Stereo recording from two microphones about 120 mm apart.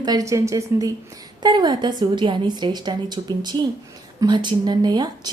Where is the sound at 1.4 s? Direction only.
35° right (ahead or behind).